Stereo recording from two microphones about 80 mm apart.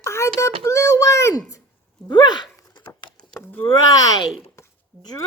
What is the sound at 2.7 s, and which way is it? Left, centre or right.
Patter, left.